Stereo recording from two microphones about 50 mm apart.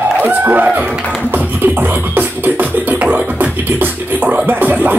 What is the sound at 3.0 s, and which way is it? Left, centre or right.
Music, right.